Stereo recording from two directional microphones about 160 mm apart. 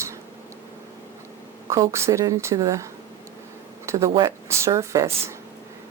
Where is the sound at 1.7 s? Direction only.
20° right (ahead or behind).